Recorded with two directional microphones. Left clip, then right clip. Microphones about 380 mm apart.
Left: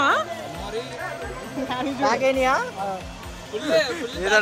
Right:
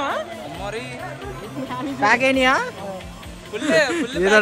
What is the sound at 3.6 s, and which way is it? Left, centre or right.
Speech, right.